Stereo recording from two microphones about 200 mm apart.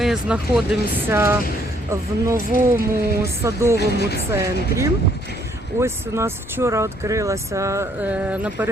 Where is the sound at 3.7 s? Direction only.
55° left (ahead or behind).